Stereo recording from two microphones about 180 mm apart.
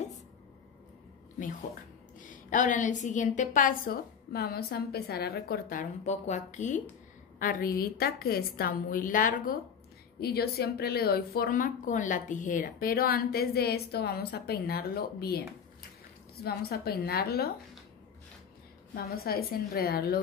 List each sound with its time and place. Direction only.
2.1 s a woman's voice: 45° left (ahead or behind)
7.3 s a woman's voice: 55° left (ahead or behind)
10.2 s speech: 60° left (ahead or behind)
16.4 s speech: 60° left (ahead or behind)
18.9 s speech: 60° left (ahead or behind)